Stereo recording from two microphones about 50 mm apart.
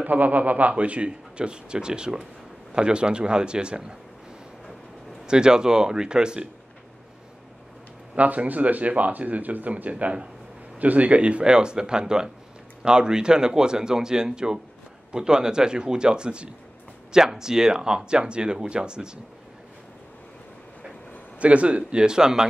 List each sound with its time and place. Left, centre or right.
0.0 s a man's voice: right; by 3.9 s centre
5.2 s speech: centre
8.1 s speech: right
21.4 s a man's voice: right